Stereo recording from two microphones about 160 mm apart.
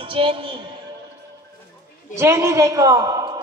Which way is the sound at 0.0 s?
35° right (ahead or behind).